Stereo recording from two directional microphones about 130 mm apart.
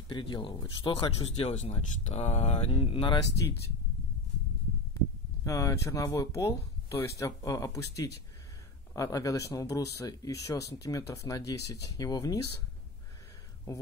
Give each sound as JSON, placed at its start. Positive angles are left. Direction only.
{"t": 0.1, "sound": "speech", "side_deg": 40}
{"t": 0.9, "sound": "speech", "side_deg": 45}
{"t": 5.4, "sound": "speech", "side_deg": 25}